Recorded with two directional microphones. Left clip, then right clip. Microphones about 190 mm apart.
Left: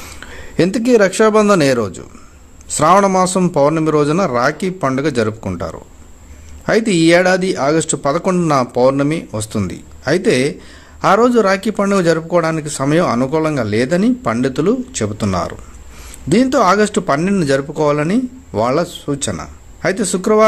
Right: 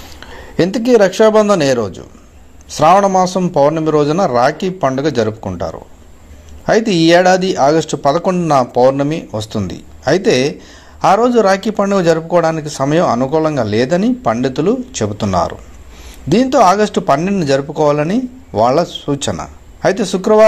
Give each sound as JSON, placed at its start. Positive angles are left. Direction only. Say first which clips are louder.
{"t": 0.2, "sound": "a man's voice", "louder": "right 1 dB", "side_deg": 15}